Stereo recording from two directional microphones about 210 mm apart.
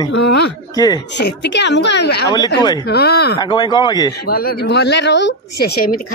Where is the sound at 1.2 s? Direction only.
55° left (ahead or behind).